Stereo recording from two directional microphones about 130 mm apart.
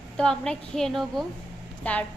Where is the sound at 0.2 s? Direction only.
5° left (ahead or behind).